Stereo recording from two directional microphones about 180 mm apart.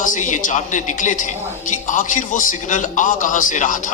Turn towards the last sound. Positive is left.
turn(degrees=45)  # may be behind; listen again after turning